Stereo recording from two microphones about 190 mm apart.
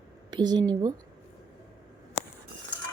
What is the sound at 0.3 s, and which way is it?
Speech, 20° right (ahead or behind).